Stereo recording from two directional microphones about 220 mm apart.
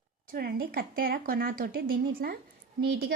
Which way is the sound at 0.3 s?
45° right (ahead or behind).